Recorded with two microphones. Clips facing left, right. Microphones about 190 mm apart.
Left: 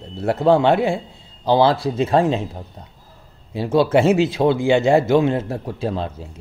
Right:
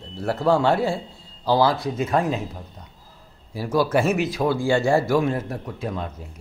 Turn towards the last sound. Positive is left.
turn(degrees=30)  # may be behind; listen again after turning